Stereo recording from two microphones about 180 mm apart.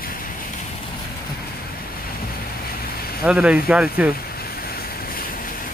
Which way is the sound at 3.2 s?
5° right (ahead or behind).